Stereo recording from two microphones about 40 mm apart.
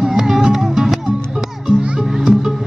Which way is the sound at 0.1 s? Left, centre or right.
Centre.